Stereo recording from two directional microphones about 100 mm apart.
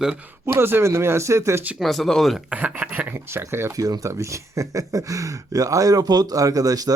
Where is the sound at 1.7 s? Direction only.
Centre (ahead or behind).